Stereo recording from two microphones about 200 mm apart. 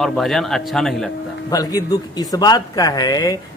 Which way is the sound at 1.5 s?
20° left (ahead or behind).